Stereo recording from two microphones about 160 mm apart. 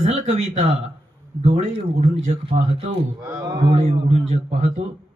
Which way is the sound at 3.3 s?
25° right (ahead or behind).